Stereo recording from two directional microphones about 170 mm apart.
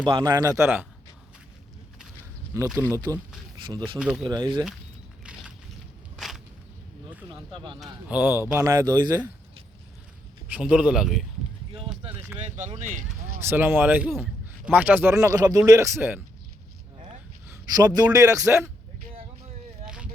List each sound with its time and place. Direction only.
0.0 s a man's voice: 25° right (ahead or behind)
2.7 s a man's voice: 15° right (ahead or behind)
3.9 s speech: 5° right (ahead or behind)
4.3 s a man's voice: 25° right (ahead or behind)
6.1 s a sound: centre (ahead or behind)
7.5 s a man's voice: 30° right (ahead or behind)
8.1 s a man's voice: 10° right (ahead or behind)
10.5 s speech: 5° right (ahead or behind)
11.7 s a sound: 30° right (ahead or behind)
12.5 s speech: 45° right (ahead or behind)
13.4 s a man's voice: 10° right (ahead or behind)
17.7 s a man's voice: 25° right (ahead or behind)